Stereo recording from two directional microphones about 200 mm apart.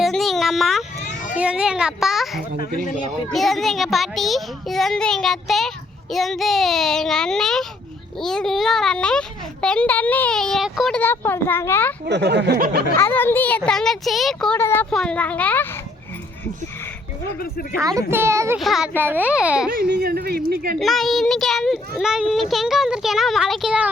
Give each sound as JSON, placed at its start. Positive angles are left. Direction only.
{"t": 0.0, "sound": "a sound", "side_deg": 0}
{"t": 1.4, "sound": "a child's voice", "side_deg": -5}
{"t": 12.0, "sound": "speech", "side_deg": -55}
{"t": 12.5, "sound": "speech", "side_deg": -45}
{"t": 13.0, "sound": "a child's voice", "side_deg": 10}
{"t": 17.4, "sound": "speech", "side_deg": 50}
{"t": 17.7, "sound": "a child's voice", "side_deg": -15}
{"t": 18.6, "sound": "a child's voice", "side_deg": 0}
{"t": 19.7, "sound": "speech", "side_deg": -50}
{"t": 20.7, "sound": "a child's voice", "side_deg": 0}